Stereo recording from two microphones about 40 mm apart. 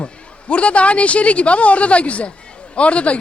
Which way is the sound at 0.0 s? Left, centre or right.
Left.